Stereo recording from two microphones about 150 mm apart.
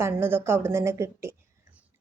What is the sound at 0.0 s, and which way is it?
Speech, 15° right (ahead or behind).